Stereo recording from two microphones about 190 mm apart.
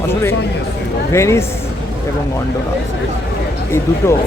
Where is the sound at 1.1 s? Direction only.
15° left (ahead or behind).